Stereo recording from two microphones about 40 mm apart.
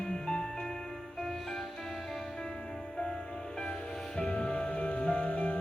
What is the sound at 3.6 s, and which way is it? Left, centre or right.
Music, centre.